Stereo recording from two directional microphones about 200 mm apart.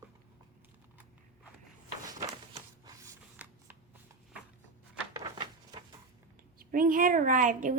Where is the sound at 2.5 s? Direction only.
15° right (ahead or behind).